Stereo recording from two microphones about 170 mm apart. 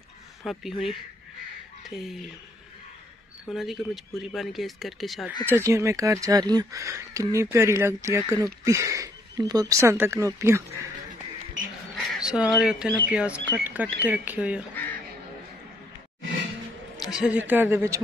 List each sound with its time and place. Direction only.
0.4 s speech: centre (ahead or behind)
3.4 s speech: centre (ahead or behind)
5.5 s speech: 15° right (ahead or behind)
12.1 s a sound: 5° right (ahead or behind)
12.5 s speech: 5° right (ahead or behind)
16.9 s a man's voice: centre (ahead or behind)